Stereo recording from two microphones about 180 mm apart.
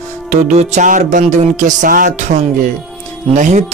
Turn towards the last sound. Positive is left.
turn(degrees=-45)  # may be behind; listen again after turning